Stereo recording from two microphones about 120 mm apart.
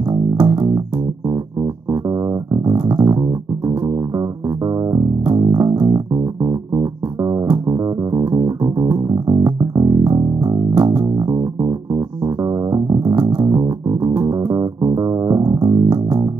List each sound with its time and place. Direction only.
0.1 s music: 40° right (ahead or behind)
1.9 s music: 30° right (ahead or behind)
13.2 s music: 15° right (ahead or behind)
13.5 s music: 35° right (ahead or behind)